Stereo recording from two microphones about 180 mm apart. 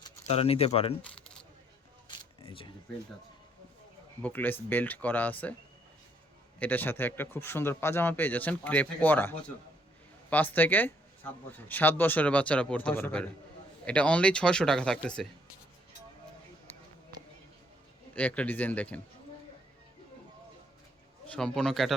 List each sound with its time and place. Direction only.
0.3 s speech: 35° left (ahead or behind)
2.0 s a sound: 30° left (ahead or behind)
4.2 s speech: 10° left (ahead or behind)
6.6 s speech: 10° left (ahead or behind)
18.1 s speech: 10° left (ahead or behind)
21.2 s speech: 5° left (ahead or behind)